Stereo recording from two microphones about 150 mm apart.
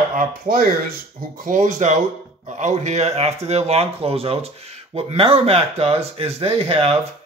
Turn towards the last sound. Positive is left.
turn(degrees=-40)  # may be behind; listen again after turning